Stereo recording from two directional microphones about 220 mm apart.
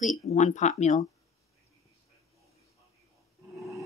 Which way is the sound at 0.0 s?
35° left (ahead or behind).